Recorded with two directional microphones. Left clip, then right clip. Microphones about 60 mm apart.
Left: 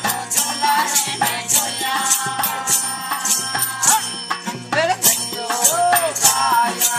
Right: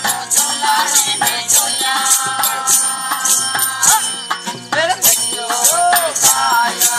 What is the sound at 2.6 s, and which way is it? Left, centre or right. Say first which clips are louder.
Music: right 5 dB; centre.